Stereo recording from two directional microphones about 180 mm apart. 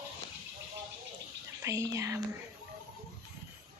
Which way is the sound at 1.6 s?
15° right (ahead or behind).